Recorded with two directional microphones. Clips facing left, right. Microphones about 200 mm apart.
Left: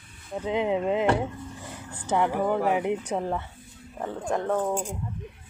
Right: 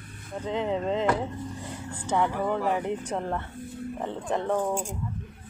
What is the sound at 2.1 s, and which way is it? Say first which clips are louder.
Speech: left 2 dB; 10° left (ahead or behind).